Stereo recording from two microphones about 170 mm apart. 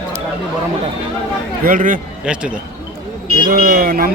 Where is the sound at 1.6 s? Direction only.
50° right (ahead or behind).